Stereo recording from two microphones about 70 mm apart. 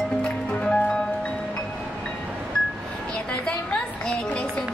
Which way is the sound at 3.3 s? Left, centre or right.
Centre.